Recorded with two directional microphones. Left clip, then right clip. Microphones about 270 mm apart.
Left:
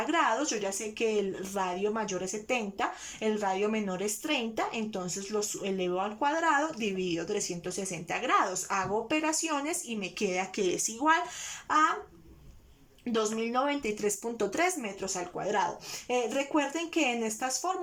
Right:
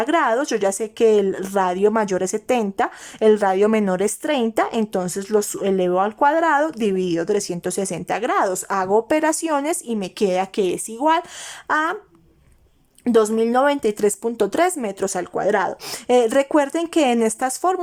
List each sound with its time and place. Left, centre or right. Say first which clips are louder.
0.0 s speech: right 9 dB; right
13.1 s speech: right 14 dB; right